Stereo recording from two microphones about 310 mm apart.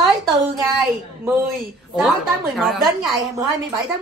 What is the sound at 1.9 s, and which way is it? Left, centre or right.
Speech, centre.